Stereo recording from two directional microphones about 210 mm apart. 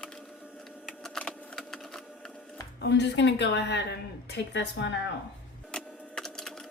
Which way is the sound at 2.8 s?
55° left (ahead or behind).